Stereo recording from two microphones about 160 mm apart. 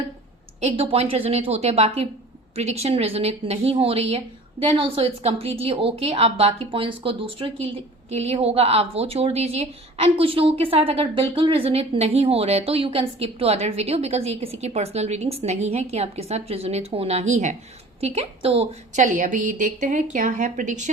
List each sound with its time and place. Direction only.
0.6 s a woman's voice: 40° right (ahead or behind)